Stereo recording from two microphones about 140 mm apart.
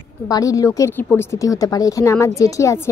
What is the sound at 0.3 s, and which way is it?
A woman's voice, 25° left (ahead or behind).